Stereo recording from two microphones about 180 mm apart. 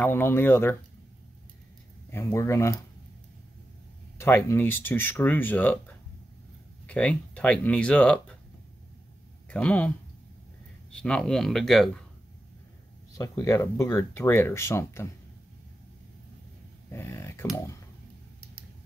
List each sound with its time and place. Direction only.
0.0 s speech: 10° left (ahead or behind)
2.0 s speech: 15° left (ahead or behind)
4.2 s speech: 15° left (ahead or behind)
6.9 s speech: 5° left (ahead or behind)
9.5 s speech: 5° left (ahead or behind)
13.2 s speech: 15° left (ahead or behind)
16.9 s speech: 15° left (ahead or behind)